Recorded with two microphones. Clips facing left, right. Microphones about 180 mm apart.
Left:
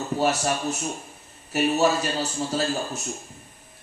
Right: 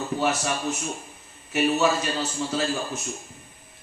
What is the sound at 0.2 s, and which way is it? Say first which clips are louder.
A man's voice: left 3 dB; 40° left (ahead or behind).